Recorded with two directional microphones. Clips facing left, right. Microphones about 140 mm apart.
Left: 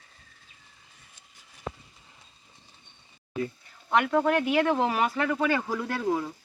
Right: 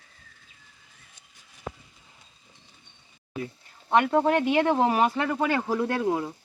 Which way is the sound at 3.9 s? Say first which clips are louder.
Right 2 dB; 25° right (ahead or behind).